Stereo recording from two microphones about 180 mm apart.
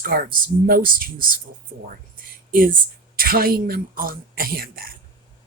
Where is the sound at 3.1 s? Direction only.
55° right (ahead or behind).